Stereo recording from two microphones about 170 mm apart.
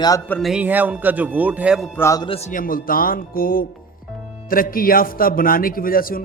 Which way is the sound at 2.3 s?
40° left (ahead or behind).